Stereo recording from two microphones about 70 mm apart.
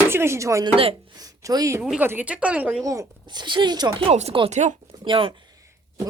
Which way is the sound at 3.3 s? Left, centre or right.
Right.